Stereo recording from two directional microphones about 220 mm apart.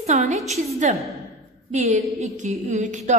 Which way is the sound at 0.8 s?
35° right (ahead or behind).